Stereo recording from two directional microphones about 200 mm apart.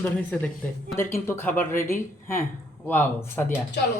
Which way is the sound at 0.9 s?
15° left (ahead or behind).